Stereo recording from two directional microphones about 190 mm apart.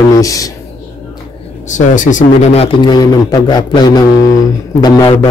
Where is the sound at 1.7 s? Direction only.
40° left (ahead or behind).